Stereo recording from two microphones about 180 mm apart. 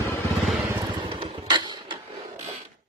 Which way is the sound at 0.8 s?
25° right (ahead or behind).